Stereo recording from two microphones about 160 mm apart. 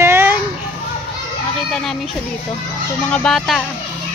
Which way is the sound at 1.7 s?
Centre (ahead or behind).